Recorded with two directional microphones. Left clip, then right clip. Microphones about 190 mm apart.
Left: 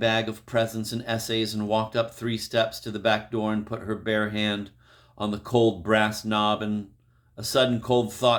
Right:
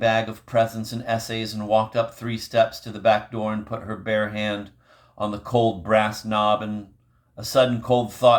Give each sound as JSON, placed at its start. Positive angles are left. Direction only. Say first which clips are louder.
{"t": 0.0, "sound": "speech", "louder": "right 3 dB", "side_deg": 30}